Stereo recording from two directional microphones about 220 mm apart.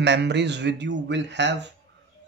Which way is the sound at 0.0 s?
50° right (ahead or behind).